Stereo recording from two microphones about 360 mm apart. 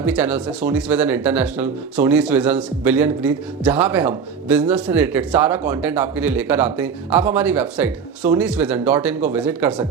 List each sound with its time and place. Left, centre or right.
0.0 s speech: centre